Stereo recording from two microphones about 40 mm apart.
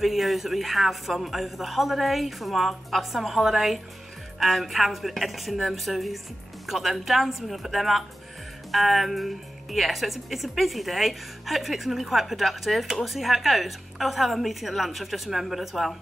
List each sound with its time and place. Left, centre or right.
0.0 s a woman's voice: centre